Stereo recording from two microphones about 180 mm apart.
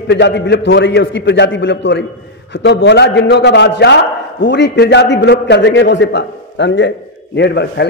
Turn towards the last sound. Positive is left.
turn(degrees=70)  # may be behind; listen again after turning